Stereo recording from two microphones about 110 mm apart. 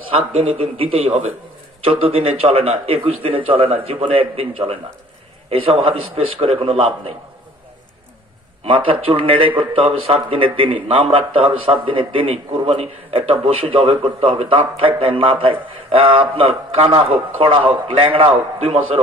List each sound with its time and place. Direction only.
0.3 s a man's voice: 60° right (ahead or behind)
8.6 s a man's voice: 55° right (ahead or behind)